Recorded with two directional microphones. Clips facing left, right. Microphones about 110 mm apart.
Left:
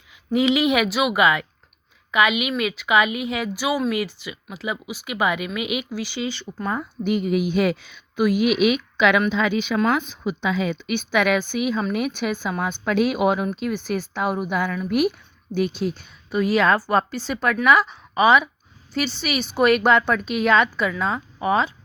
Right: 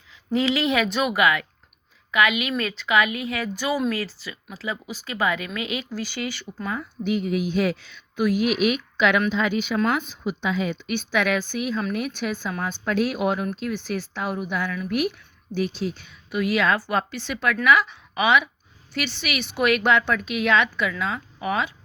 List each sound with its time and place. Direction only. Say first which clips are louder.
0.3 s speech: left 3 dB; 15° left (ahead or behind)
1.1 s a woman's voice: left 2 dB; 20° left (ahead or behind)
6.7 s a woman's voice: left 1 dB; 55° left (ahead or behind)
9.0 s a woman's voice: left 2 dB; 90° left; by 16.0 s 55° left (ahead or behind)
16.3 s a woman's voice: left 3 dB; 35° left (ahead or behind)